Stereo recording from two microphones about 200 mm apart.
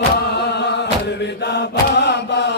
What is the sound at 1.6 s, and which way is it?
Chant, 60° left (ahead or behind).